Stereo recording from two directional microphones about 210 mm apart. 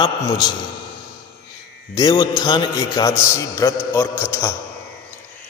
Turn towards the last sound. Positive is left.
turn(degrees=10)  # may be behind; listen again after turning